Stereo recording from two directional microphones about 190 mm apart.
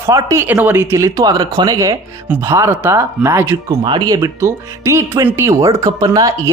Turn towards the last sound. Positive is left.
turn(degrees=-20)  # may be behind; listen again after turning